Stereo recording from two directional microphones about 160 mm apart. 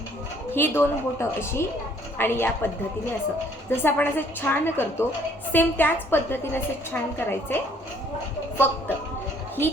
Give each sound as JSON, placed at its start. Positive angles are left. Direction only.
{"t": 0.5, "sound": "a woman's voice", "side_deg": 15}
{"t": 3.7, "sound": "a woman's voice", "side_deg": 15}